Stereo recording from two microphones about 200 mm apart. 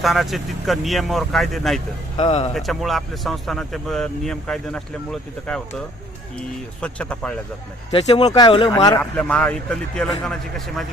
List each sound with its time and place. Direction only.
0.0 s speech: centre (ahead or behind)
2.1 s speech: 30° left (ahead or behind)
2.6 s speech: centre (ahead or behind)
6.8 s speech: 5° left (ahead or behind)
7.9 s speech: 30° left (ahead or behind)
9.0 s speech: 5° left (ahead or behind)